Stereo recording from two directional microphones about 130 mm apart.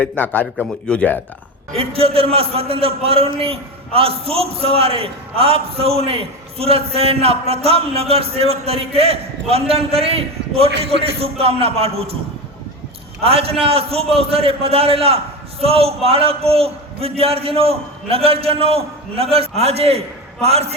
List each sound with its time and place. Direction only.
0.0 s a man's voice: 15° left (ahead or behind)
1.7 s a man's voice: 50° right (ahead or behind)
13.2 s a man's voice: 50° right (ahead or behind)